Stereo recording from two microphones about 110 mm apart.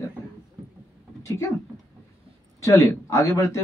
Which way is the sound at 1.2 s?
25° left (ahead or behind).